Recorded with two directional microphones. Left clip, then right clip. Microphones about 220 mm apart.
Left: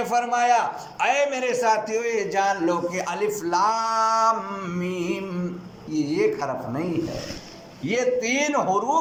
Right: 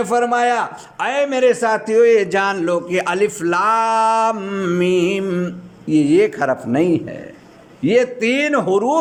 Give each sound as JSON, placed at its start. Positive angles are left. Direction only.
{"t": 0.0, "sound": "a man's voice", "side_deg": -35}
{"t": 7.9, "sound": "a man's voice", "side_deg": -35}